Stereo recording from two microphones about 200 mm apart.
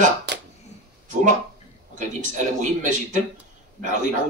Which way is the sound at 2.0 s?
40° right (ahead or behind).